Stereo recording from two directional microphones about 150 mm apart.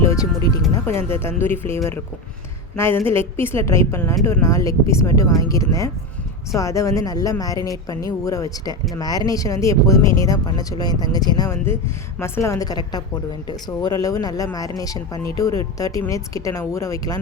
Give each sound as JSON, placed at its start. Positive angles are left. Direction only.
{"t": 0.0, "sound": "a woman's voice", "side_deg": 20}